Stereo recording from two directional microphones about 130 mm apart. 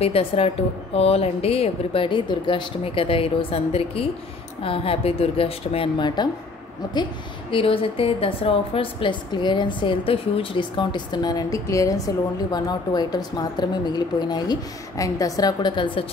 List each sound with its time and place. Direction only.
0.0 s speech: 50° left (ahead or behind)
7.5 s a woman's voice: 45° left (ahead or behind)